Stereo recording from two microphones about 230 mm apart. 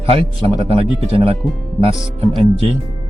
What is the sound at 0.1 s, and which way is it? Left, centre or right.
Speech, right.